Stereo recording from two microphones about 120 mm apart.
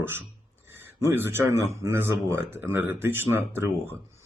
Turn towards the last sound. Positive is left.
turn(degrees=-20)  # may be behind; listen again after turning